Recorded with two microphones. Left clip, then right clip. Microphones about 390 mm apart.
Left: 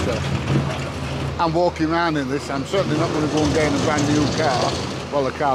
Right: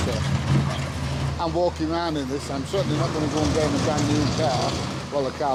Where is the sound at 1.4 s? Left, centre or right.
Centre.